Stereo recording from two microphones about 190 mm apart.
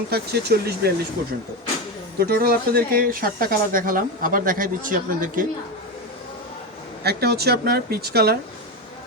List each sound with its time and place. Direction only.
0.1 s speech: 55° right (ahead or behind)
2.1 s speech: 55° right (ahead or behind)
7.0 s speech: 55° right (ahead or behind)